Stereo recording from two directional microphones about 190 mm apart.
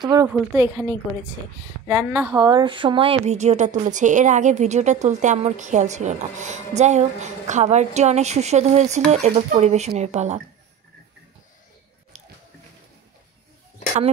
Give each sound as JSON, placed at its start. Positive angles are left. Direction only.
{"t": 0.0, "sound": "a woman's voice", "side_deg": -20}
{"t": 0.3, "sound": "a woman's voice", "side_deg": -10}
{"t": 1.9, "sound": "a woman's voice", "side_deg": -10}
{"t": 2.3, "sound": "a woman's voice", "side_deg": -25}
{"t": 12.1, "sound": "biting", "side_deg": -35}